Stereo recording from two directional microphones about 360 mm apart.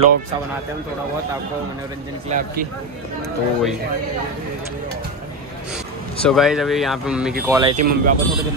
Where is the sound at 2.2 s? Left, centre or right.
Right.